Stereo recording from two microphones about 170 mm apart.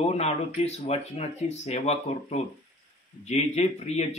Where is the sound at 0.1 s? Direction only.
40° left (ahead or behind).